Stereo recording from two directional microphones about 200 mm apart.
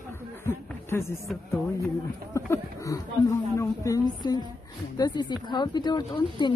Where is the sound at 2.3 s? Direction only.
15° left (ahead or behind).